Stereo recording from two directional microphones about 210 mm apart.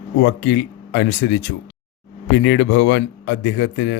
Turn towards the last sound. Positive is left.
turn(degrees=60)  # may be behind; listen again after turning